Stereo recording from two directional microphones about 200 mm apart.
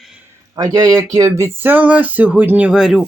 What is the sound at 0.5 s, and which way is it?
Speech, 20° right (ahead or behind).